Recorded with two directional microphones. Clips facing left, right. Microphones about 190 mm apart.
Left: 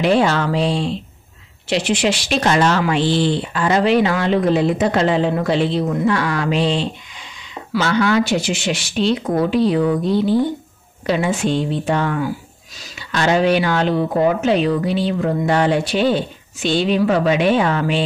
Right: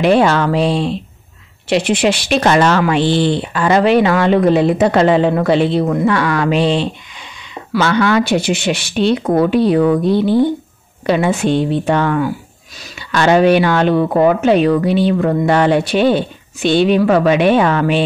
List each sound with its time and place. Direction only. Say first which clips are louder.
0.0 s speech: right 4 dB; 60° right (ahead or behind)